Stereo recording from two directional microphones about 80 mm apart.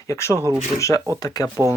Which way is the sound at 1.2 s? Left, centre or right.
Left.